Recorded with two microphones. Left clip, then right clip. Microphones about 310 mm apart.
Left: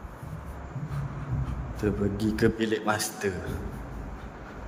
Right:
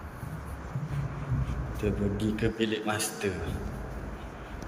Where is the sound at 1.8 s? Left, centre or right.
Centre.